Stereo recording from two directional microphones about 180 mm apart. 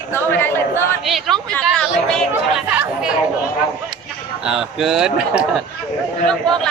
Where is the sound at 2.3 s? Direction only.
5° right (ahead or behind).